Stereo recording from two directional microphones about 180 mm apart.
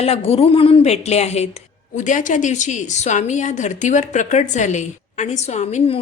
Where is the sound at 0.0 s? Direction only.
35° left (ahead or behind).